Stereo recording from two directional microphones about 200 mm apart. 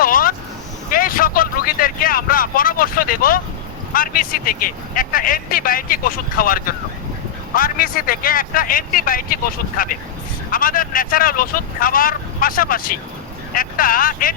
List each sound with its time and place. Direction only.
0.0 s vehicle: 45° left (ahead or behind)
3.9 s speech: 45° left (ahead or behind)